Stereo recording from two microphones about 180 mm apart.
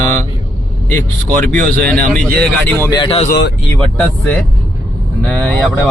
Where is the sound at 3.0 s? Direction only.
35° left (ahead or behind).